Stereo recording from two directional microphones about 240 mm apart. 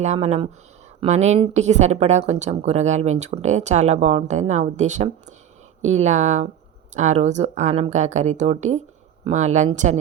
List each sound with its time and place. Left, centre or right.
0.0 s speech: right